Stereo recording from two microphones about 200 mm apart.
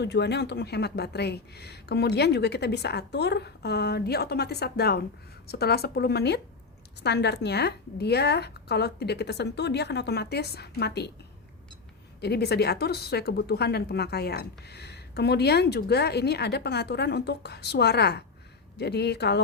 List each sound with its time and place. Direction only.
0.0 s speech: 60° left (ahead or behind)
12.2 s speech: 55° left (ahead or behind)